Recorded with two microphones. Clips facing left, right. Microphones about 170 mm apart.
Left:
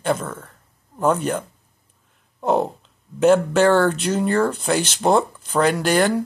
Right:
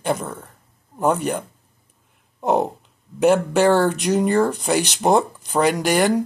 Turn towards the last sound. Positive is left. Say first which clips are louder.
# even
turn(degrees=-10)  # may be behind; listen again after turning